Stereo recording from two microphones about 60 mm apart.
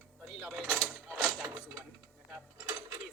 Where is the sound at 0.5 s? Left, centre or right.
Centre.